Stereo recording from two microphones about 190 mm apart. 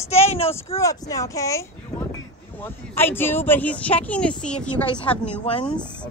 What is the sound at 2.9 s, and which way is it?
Speech, 10° left (ahead or behind).